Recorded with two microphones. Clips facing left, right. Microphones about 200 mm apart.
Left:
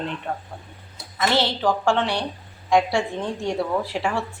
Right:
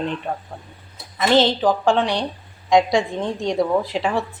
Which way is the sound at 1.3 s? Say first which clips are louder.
Right 6 dB; 20° right (ahead or behind).